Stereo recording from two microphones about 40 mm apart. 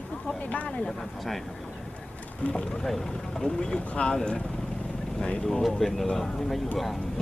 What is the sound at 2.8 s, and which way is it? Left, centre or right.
Speech, centre.